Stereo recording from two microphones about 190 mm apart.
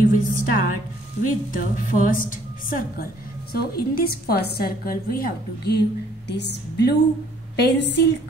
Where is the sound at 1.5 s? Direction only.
45° left (ahead or behind).